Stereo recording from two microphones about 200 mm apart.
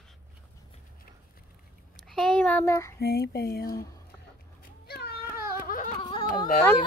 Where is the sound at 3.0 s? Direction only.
50° left (ahead or behind).